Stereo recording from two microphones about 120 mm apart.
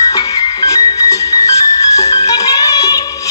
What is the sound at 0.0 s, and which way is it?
Music, 30° left (ahead or behind).